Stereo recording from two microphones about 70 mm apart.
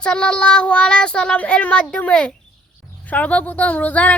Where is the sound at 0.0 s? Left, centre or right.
Centre.